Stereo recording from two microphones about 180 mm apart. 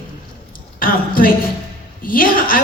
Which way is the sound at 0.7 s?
50° left (ahead or behind).